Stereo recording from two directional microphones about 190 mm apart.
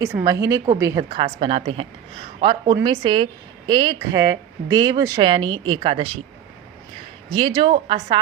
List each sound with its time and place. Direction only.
0.0 s a woman's voice: 15° right (ahead or behind); by 6.2 s 30° right (ahead or behind)
7.3 s speech: 25° right (ahead or behind)